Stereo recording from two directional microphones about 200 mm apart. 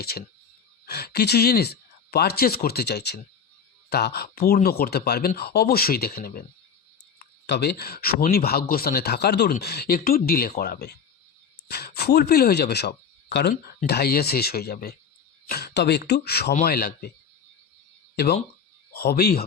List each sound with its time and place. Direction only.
0.9 s speech: 50° left (ahead or behind)
7.4 s speech: 55° left (ahead or behind)
18.9 s speech: 50° left (ahead or behind)